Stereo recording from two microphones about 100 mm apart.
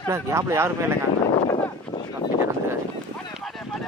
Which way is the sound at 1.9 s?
65° left (ahead or behind).